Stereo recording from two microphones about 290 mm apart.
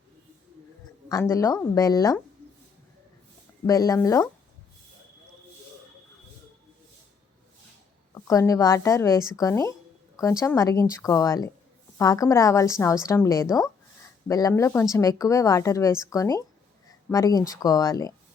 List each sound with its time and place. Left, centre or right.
1.0 s a woman's voice: centre
3.7 s a woman's voice: centre
8.1 s a woman's voice: centre